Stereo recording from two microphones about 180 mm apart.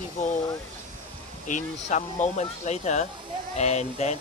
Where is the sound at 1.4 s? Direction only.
45° left (ahead or behind).